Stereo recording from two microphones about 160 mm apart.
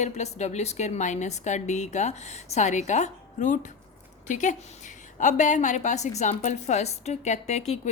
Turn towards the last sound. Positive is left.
turn(degrees=45)  # may be behind; listen again after turning